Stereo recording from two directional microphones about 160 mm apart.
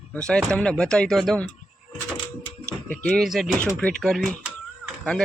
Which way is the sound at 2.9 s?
5° left (ahead or behind).